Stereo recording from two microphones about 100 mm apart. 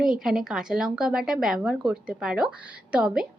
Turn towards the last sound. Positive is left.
turn(degrees=-5)  # may be behind; listen again after turning